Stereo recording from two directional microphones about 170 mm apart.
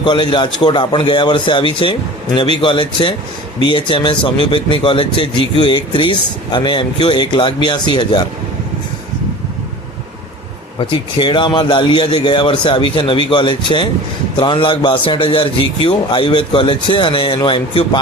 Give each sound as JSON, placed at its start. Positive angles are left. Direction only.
{"t": 0.0, "sound": "speech", "side_deg": 25}
{"t": 10.8, "sound": "speech", "side_deg": 30}